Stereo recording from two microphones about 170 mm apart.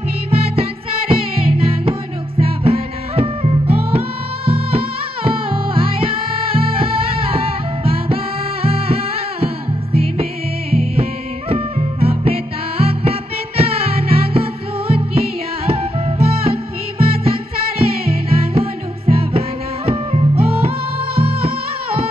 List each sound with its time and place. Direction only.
0.3 s music: 35° right (ahead or behind)
10.7 s music: 35° right (ahead or behind)